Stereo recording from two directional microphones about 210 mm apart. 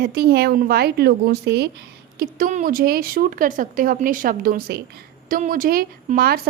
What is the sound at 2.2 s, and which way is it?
A woman's voice, 40° right (ahead or behind).